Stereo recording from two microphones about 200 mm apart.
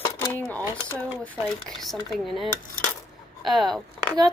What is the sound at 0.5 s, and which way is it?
Speech, 10° left (ahead or behind).